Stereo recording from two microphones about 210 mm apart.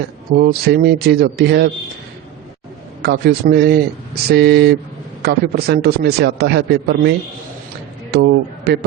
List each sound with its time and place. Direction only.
0.3 s a man's voice: 50° right (ahead or behind)
3.0 s a man's voice: 50° right (ahead or behind)
8.1 s a man's voice: 50° right (ahead or behind)